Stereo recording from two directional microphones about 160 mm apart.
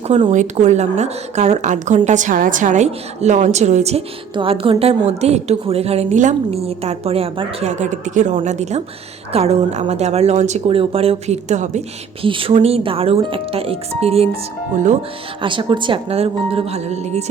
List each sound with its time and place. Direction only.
0.3 s a woman's voice: 50° right (ahead or behind)
12.2 s speech: 35° right (ahead or behind)
15.4 s speech: 30° right (ahead or behind)